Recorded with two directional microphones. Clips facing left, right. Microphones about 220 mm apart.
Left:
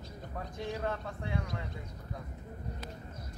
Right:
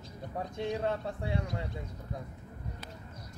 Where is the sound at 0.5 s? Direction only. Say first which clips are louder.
Right 4 dB; 30° right (ahead or behind).